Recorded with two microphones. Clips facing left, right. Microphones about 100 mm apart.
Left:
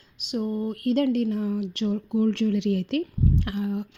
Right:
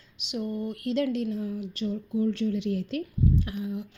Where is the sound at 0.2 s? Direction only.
45° left (ahead or behind).